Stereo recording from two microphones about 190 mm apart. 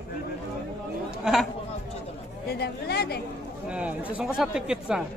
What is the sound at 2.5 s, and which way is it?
Speech, 55° left (ahead or behind).